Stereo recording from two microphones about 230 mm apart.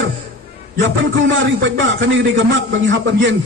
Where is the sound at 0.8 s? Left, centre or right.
Right.